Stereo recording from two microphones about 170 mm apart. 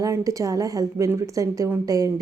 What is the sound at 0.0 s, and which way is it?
A woman's voice, 20° right (ahead or behind).